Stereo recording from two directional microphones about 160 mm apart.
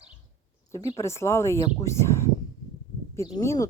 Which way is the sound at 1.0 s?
15° left (ahead or behind).